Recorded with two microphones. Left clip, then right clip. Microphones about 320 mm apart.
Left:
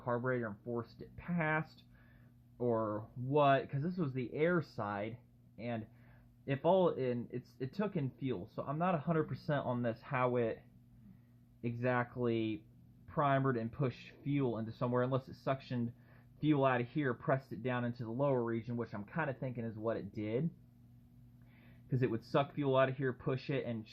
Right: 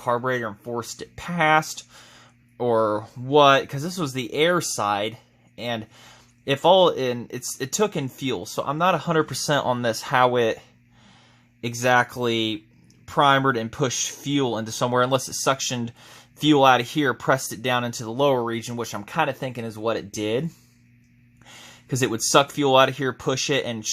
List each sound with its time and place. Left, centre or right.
0.0 s speech: right
11.6 s speech: right
21.8 s speech: right